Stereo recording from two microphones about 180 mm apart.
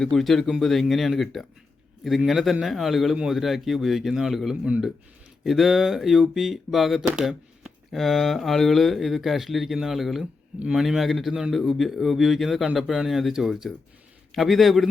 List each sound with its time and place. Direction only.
0.0 s speech: centre (ahead or behind)